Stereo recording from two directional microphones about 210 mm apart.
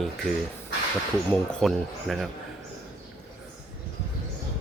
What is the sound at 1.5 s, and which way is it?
Speech, centre (ahead or behind).